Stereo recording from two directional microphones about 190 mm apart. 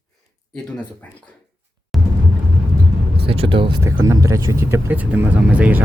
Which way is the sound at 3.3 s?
25° right (ahead or behind).